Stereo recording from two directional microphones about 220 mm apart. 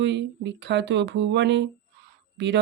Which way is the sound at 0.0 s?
55° right (ahead or behind).